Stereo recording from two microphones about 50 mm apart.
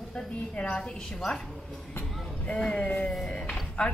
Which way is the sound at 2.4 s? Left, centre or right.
Left.